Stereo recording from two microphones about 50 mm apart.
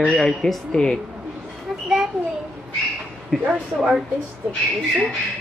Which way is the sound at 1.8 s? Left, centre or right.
Centre.